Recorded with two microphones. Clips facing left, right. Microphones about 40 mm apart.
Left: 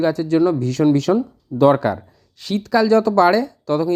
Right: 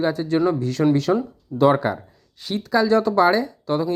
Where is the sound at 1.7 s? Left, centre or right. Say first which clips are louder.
Left 3 dB; centre.